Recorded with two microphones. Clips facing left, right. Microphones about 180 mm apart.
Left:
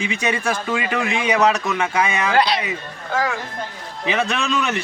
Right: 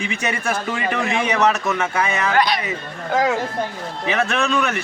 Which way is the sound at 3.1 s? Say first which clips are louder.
Right 4 dB; 20° right (ahead or behind).